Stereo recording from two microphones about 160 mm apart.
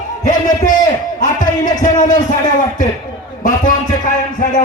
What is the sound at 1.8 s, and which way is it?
Speech, 50° left (ahead or behind).